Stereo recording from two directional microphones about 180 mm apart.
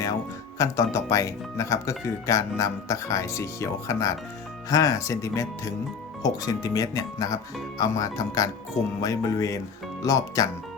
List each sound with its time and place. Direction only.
0.6 s speech: 15° left (ahead or behind)